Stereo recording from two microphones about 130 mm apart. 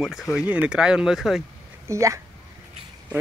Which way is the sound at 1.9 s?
25° right (ahead or behind).